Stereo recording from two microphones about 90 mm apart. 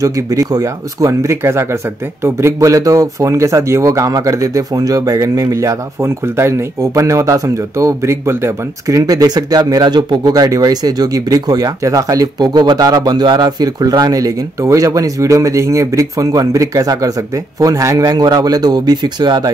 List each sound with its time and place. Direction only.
0.0 s a man's voice: 40° right (ahead or behind)